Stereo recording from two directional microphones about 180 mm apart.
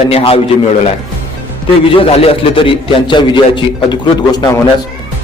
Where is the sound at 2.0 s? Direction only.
30° left (ahead or behind).